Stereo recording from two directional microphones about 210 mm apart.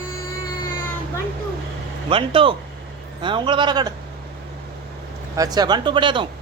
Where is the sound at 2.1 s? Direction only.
25° right (ahead or behind).